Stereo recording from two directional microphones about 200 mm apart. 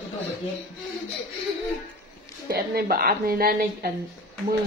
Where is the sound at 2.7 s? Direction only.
50° right (ahead or behind).